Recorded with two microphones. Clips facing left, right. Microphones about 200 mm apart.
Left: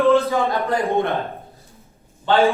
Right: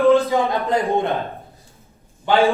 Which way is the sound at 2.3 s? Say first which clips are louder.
Even; 15° right (ahead or behind).